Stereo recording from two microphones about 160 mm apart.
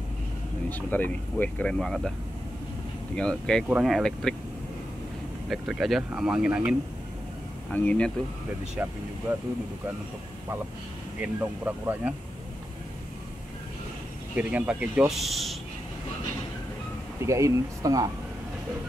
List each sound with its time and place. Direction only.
0.7 s speech: 10° left (ahead or behind)
3.2 s speech: 5° left (ahead or behind)
5.5 s speech: centre (ahead or behind)
7.7 s speech: 10° left (ahead or behind)
11.1 s speech: 10° right (ahead or behind)
14.3 s speech: 10° right (ahead or behind)
17.3 s speech: 20° right (ahead or behind)